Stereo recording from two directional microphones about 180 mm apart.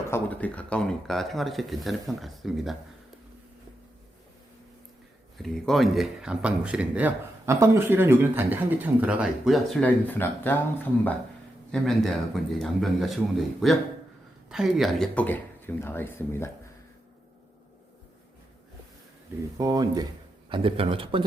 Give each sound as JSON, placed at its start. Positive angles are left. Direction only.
{"t": 0.1, "sound": "speech", "side_deg": 10}
{"t": 5.4, "sound": "speech", "side_deg": 0}
{"t": 9.8, "sound": "speech", "side_deg": 10}
{"t": 11.7, "sound": "speech", "side_deg": 0}
{"t": 19.5, "sound": "a man's voice", "side_deg": -20}